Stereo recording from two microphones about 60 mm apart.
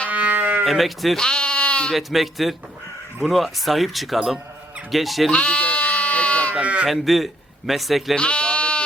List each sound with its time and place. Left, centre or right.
0.1 s sheep: right
0.6 s speech: centre
1.1 s speech: centre
1.9 s speech: centre
5.3 s sheep: left
6.5 s sheep: right
6.8 s speech: centre
8.1 s bleat: centre